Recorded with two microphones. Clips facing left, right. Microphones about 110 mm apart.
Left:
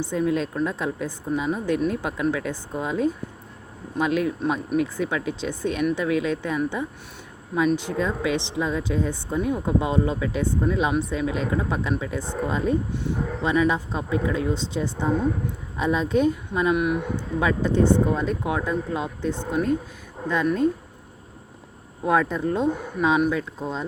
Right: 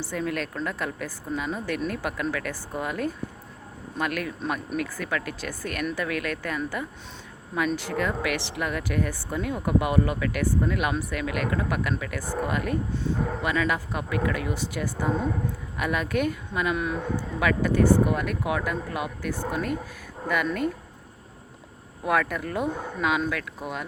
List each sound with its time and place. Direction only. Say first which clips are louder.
0.0 s speech: left 6 dB; 15° left (ahead or behind)
11.2 s speech: left 3 dB; 90° right
11.7 s speech: left 3 dB; 25° left (ahead or behind)
19.5 s speech: left 8 dB; 90° right
20.2 s speech: left 3 dB; 20° left (ahead or behind)
22.0 s speech: left 4 dB; 25° left (ahead or behind)